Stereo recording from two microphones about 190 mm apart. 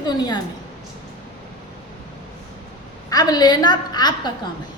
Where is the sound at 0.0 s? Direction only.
20° left (ahead or behind).